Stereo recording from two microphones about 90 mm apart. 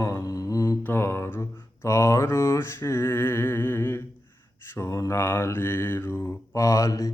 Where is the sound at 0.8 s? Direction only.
25° left (ahead or behind).